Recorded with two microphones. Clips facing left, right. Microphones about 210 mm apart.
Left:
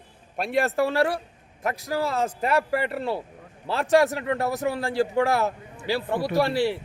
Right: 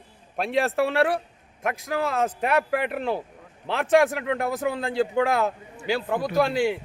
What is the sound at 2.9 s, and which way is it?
Speech, 15° right (ahead or behind).